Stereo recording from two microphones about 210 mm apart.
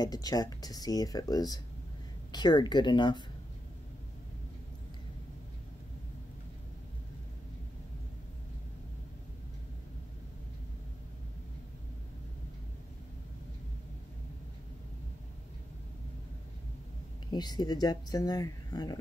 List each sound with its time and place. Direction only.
0.0 s speech: 20° left (ahead or behind)
17.3 s speech: 20° left (ahead or behind)